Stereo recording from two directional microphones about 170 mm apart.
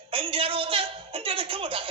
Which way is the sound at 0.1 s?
30° right (ahead or behind).